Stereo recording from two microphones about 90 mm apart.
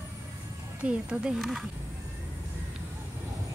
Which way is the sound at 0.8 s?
10° right (ahead or behind).